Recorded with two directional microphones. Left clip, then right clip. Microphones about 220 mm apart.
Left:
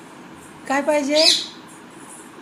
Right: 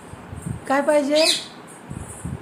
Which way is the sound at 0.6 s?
20° right (ahead or behind).